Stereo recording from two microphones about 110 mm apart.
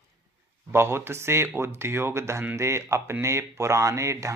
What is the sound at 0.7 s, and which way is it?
Speech, 20° right (ahead or behind).